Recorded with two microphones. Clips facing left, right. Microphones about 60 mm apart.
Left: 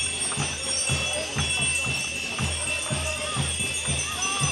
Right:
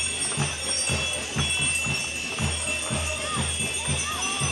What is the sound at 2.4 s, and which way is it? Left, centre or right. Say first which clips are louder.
Music: even; centre.